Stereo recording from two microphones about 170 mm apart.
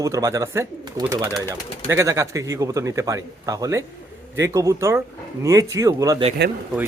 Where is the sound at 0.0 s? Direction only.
20° right (ahead or behind).